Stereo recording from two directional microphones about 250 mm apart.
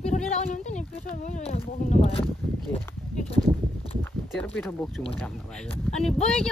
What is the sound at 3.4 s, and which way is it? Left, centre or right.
Speech, right.